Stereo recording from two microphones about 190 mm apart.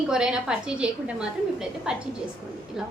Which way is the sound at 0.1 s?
5° right (ahead or behind).